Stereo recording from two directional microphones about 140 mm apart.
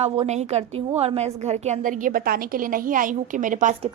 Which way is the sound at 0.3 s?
50° right (ahead or behind).